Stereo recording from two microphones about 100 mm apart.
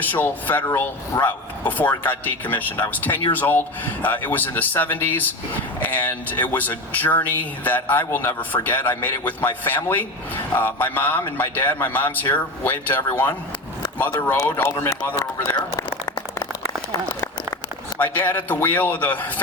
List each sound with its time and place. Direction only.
0.0 s a man's voice: 15° left (ahead or behind)
17.9 s speech: 15° left (ahead or behind)